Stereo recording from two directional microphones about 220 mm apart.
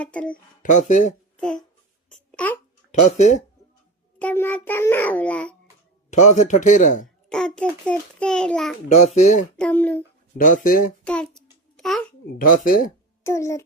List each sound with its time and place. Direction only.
0.0 s a child's voice: 5° left (ahead or behind)
0.6 s a man's voice: 35° left (ahead or behind)
1.4 s a child's voice: 5° left (ahead or behind)
3.0 s a man's voice: 35° left (ahead or behind)
4.2 s a child's voice: 5° left (ahead or behind)
6.1 s a man's voice: 30° left (ahead or behind)
7.3 s a child's voice: 5° left (ahead or behind)
8.9 s a man's voice: 30° left (ahead or behind)
9.6 s a child's voice: 5° left (ahead or behind)
10.3 s a man's voice: 35° left (ahead or behind)
11.0 s a sound: 5° left (ahead or behind)
12.4 s a man's voice: 40° left (ahead or behind)
13.2 s a child's voice: 15° left (ahead or behind)